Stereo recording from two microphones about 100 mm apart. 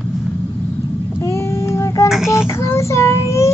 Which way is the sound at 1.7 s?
30° left (ahead or behind).